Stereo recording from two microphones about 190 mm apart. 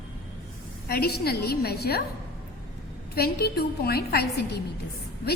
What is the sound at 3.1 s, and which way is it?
A woman's voice, 55° left (ahead or behind).